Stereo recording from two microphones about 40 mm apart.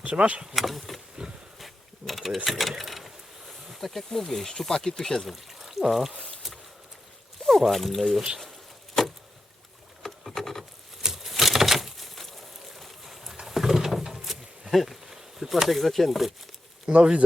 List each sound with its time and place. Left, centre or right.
0.1 s speech: right
0.5 s speech: centre
1.5 s sewing machine: centre
3.7 s speech: centre
5.3 s a sound: centre
7.4 s speech: centre
10.0 s boat: centre
10.6 s a sound: centre
15.0 s speech: centre
16.9 s speech: right